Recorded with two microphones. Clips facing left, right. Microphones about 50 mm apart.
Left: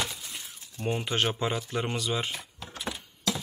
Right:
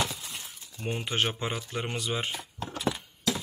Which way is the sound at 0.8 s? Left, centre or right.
Centre.